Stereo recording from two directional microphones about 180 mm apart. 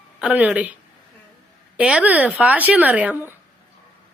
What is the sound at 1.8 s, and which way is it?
Speech, 5° right (ahead or behind).